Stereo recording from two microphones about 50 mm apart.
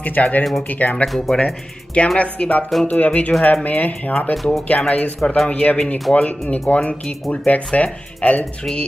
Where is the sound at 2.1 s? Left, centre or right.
Left.